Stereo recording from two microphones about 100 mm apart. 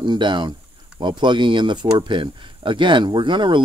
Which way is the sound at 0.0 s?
50° right (ahead or behind).